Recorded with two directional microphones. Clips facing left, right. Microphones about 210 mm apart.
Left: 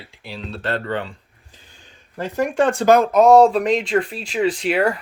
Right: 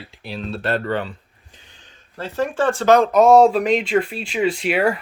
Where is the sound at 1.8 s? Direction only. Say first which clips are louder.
Left 3 dB; 15° left (ahead or behind).